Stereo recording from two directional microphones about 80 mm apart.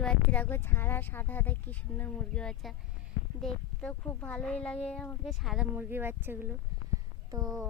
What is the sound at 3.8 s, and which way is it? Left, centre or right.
Speech, centre.